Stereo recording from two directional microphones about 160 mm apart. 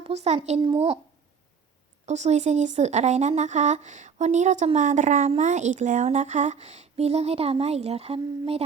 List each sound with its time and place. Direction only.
0.0 s speech: 40° right (ahead or behind)
2.0 s speech: 45° right (ahead or behind)